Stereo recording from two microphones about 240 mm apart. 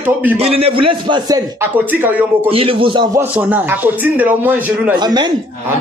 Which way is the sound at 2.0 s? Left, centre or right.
Centre.